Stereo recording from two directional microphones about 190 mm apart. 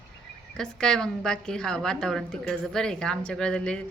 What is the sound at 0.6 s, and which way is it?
A woman's voice, 5° left (ahead or behind).